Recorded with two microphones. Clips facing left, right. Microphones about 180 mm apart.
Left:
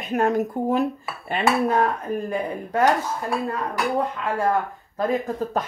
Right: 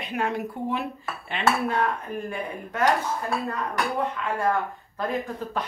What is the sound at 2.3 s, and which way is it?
Speech, 35° left (ahead or behind).